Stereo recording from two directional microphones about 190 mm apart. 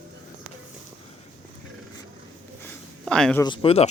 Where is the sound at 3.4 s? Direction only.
25° left (ahead or behind).